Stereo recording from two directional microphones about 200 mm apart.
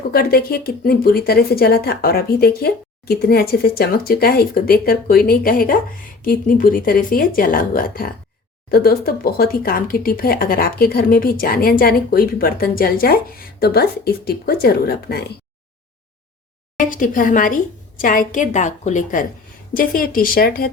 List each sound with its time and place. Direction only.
0.1 s speech: 50° left (ahead or behind)
16.7 s a woman's voice: 40° left (ahead or behind)